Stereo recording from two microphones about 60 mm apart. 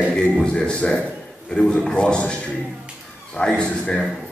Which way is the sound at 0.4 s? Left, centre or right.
Centre.